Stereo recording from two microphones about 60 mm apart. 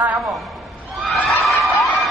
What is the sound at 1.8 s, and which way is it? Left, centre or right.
Crowd, centre.